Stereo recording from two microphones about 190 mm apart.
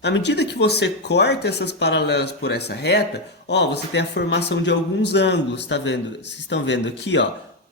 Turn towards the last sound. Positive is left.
turn(degrees=70)  # may be behind; listen again after turning